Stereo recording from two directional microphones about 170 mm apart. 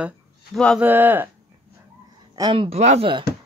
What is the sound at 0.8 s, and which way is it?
Speech, 10° right (ahead or behind).